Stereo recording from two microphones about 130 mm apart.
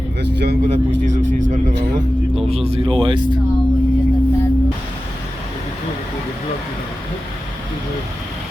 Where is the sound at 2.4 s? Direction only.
50° right (ahead or behind).